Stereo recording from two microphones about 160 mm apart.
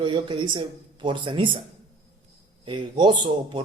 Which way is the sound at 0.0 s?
30° right (ahead or behind).